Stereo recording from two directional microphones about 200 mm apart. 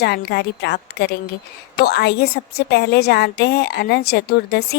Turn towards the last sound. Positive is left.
turn(degrees=55)  # may be behind; listen again after turning